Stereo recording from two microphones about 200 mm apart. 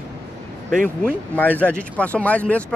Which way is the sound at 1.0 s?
10° left (ahead or behind).